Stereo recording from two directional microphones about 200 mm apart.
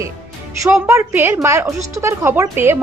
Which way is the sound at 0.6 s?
15° right (ahead or behind).